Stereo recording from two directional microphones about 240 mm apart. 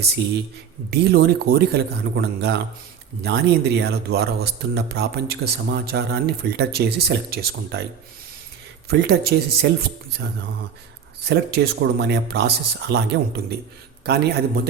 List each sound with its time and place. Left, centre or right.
0.9 s speech: right
8.9 s speech: right
11.3 s speech: right